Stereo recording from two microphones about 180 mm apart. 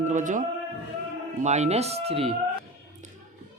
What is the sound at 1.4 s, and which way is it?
Speech, 40° right (ahead or behind).